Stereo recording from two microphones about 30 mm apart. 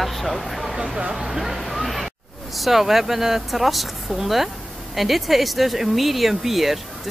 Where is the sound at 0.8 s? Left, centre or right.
Right.